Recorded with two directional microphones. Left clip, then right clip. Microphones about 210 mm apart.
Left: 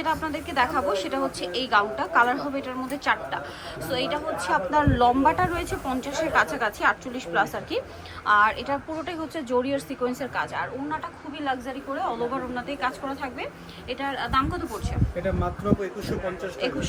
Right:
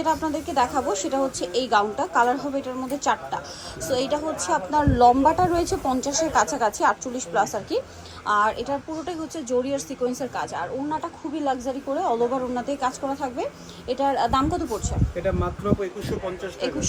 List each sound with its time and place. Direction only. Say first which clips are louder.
0.0 s a woman's voice: right 3 dB; 20° right (ahead or behind)
5.5 s speech: right 5 dB; centre (ahead or behind)
6.3 s a woman's voice: right 1 dB; 15° right (ahead or behind)
15.1 s speech: right 2 dB; 5° right (ahead or behind)